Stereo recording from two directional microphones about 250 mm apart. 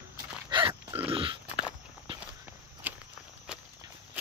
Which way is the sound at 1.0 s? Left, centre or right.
Right.